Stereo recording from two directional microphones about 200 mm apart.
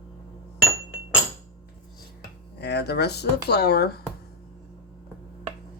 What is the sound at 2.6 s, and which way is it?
Speech, 55° left (ahead or behind).